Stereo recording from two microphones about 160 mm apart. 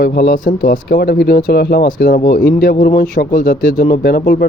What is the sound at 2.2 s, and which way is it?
Speech, 70° left (ahead or behind).